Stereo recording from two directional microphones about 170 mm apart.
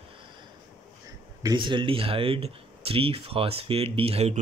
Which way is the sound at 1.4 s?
25° right (ahead or behind).